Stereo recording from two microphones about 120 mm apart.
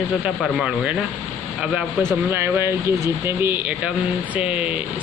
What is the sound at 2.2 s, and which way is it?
Speech, 20° right (ahead or behind).